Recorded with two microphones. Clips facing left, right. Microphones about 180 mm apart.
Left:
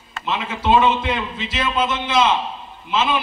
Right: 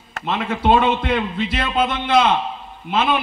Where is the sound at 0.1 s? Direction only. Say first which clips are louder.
Right 2 dB; 55° right (ahead or behind).